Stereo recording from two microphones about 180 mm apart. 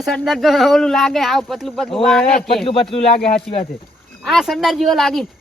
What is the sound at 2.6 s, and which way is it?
Speech, 30° left (ahead or behind).